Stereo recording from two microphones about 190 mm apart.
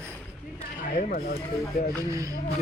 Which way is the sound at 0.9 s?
50° left (ahead or behind).